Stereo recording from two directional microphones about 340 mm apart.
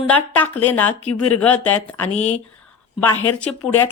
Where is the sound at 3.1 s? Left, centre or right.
Left.